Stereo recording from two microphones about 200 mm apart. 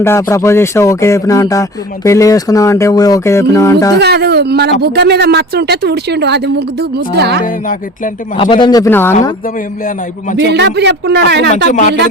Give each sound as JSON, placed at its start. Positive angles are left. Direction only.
{"t": 0.0, "sound": "speech", "side_deg": 15}
{"t": 4.0, "sound": "speech", "side_deg": -55}
{"t": 7.4, "sound": "speech", "side_deg": 40}
{"t": 8.4, "sound": "speech", "side_deg": 25}
{"t": 10.4, "sound": "speech", "side_deg": -60}